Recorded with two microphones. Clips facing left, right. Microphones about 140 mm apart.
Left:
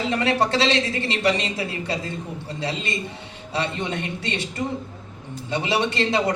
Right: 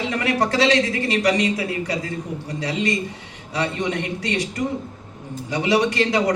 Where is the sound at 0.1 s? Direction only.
25° left (ahead or behind).